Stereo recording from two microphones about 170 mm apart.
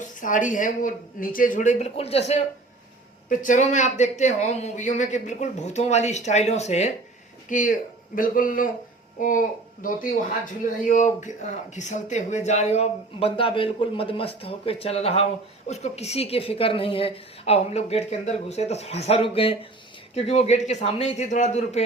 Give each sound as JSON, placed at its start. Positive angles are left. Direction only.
{"t": 0.0, "sound": "speech", "side_deg": 50}
{"t": 3.2, "sound": "speech", "side_deg": 50}